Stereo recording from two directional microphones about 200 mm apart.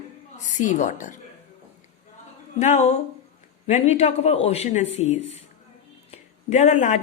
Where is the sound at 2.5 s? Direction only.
35° left (ahead or behind).